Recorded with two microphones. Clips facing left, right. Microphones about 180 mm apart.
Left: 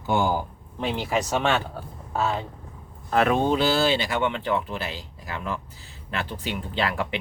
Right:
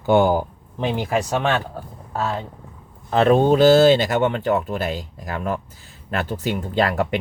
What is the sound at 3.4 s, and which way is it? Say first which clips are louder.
Speech: right 9 dB; 45° right (ahead or behind).